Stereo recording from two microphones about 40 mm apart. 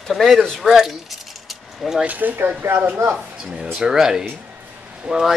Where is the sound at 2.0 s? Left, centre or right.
Right.